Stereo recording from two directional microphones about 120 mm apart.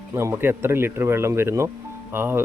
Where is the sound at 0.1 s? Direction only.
25° right (ahead or behind).